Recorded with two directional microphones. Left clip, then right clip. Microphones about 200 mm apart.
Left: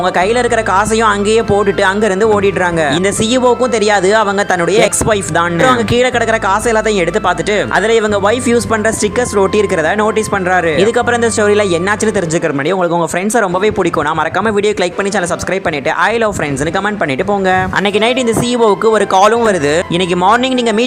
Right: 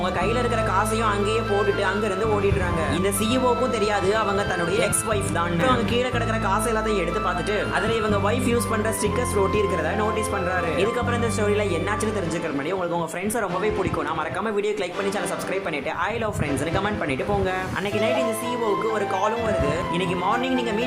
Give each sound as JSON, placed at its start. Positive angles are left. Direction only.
{"t": 0.2, "sound": "speech", "side_deg": 40}
{"t": 3.3, "sound": "speech", "side_deg": 40}
{"t": 7.9, "sound": "speech", "side_deg": 40}
{"t": 18.9, "sound": "speech", "side_deg": 50}